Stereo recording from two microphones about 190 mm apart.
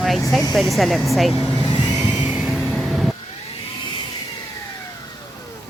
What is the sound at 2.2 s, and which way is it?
Vehicle, centre (ahead or behind).